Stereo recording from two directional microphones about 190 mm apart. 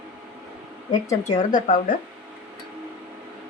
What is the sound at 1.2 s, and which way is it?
Speech, 40° left (ahead or behind).